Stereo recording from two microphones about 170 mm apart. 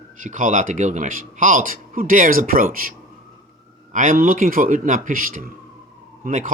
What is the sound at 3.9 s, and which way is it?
Speech, 50° right (ahead or behind).